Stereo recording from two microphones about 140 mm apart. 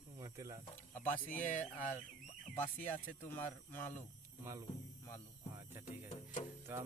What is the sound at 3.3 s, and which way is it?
Speech, 15° left (ahead or behind).